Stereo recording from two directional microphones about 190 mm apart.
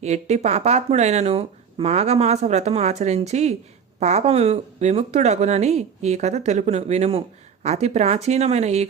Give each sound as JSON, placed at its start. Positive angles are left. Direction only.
{"t": 0.0, "sound": "speech", "side_deg": -35}